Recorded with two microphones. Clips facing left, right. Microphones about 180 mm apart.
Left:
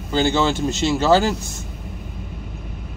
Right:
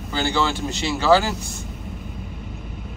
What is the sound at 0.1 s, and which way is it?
Speech, 20° left (ahead or behind).